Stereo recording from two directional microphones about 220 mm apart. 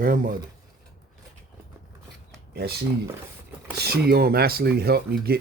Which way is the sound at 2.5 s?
45° right (ahead or behind).